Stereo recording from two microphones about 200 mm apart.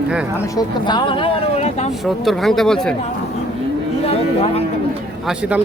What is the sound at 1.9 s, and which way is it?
Speech, centre (ahead or behind).